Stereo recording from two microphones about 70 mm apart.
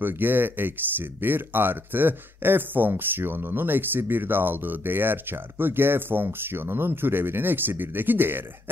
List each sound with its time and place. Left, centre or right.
0.0 s speech: right